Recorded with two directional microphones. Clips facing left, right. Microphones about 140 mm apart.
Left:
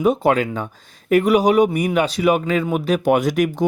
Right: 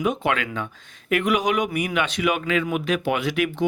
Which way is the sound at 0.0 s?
35° left (ahead or behind).